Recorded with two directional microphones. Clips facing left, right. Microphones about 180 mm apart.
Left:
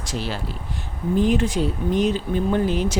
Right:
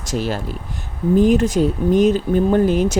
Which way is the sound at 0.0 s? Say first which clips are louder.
Right 6 dB; 45° right (ahead or behind).